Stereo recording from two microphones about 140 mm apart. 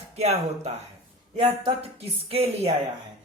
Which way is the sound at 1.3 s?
35° right (ahead or behind).